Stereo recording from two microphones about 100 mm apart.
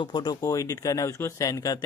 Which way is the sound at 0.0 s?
45° left (ahead or behind).